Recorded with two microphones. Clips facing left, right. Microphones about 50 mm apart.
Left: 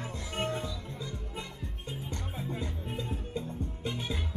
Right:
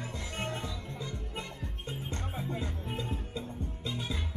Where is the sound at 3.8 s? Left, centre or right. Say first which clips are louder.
Left 1 dB; left.